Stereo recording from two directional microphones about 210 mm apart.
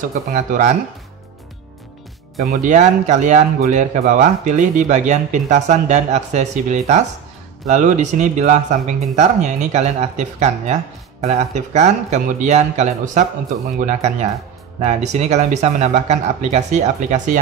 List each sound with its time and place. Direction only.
0.3 s speech: 40° right (ahead or behind)
2.4 s speech: 35° right (ahead or behind)